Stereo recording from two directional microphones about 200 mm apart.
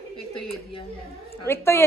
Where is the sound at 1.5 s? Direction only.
10° left (ahead or behind).